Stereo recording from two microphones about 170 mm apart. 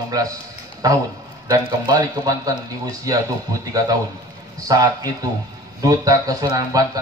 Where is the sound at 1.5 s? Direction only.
20° right (ahead or behind).